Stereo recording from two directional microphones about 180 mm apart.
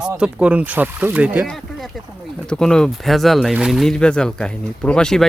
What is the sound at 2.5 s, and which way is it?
Speech, 5° left (ahead or behind).